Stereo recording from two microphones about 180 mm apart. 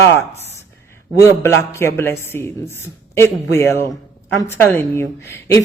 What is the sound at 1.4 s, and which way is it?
A man's voice, 15° left (ahead or behind).